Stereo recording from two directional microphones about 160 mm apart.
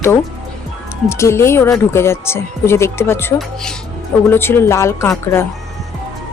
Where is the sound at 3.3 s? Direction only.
5° left (ahead or behind).